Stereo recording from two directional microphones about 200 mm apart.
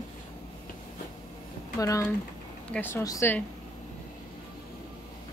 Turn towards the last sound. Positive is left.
turn(degrees=15)  # may be behind; listen again after turning